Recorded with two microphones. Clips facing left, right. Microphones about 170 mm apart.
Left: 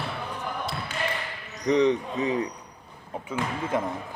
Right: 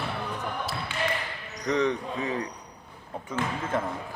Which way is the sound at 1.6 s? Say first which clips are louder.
Left 4 dB; 20° left (ahead or behind).